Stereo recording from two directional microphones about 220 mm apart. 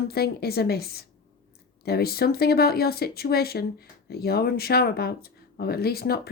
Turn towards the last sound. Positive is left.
turn(degrees=45)  # may be behind; listen again after turning